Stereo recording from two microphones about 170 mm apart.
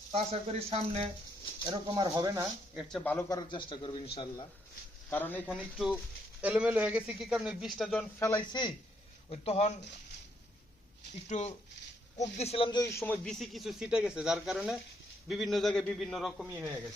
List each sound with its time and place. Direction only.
0.1 s speech: 35° right (ahead or behind); by 2.5 s 20° right (ahead or behind)
3.0 s speech: 10° left (ahead or behind)
3.2 s a man's voice: 25° left (ahead or behind)
5.1 s speech: 10° left (ahead or behind)
5.5 s a man's voice: centre (ahead or behind)
8.4 s a man's voice: 25° left (ahead or behind)
9.3 s speech: 35° left (ahead or behind)
11.3 s speech: 40° left (ahead or behind)
12.8 s speech: 15° left (ahead or behind)
13.2 s a man's voice: centre (ahead or behind)